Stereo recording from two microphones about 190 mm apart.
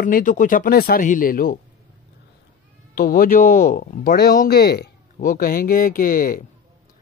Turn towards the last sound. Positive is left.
turn(degrees=50)  # may be behind; listen again after turning